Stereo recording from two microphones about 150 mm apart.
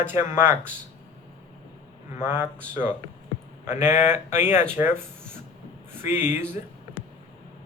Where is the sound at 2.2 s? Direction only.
15° right (ahead or behind).